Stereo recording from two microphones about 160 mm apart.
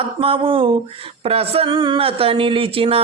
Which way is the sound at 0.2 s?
35° right (ahead or behind).